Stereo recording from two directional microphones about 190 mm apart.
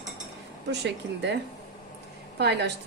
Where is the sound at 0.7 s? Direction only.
65° right (ahead or behind).